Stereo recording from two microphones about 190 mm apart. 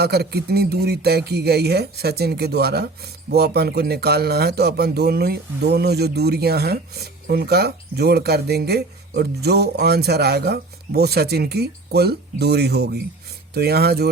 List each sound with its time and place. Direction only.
0.0 s speech: 60° right (ahead or behind)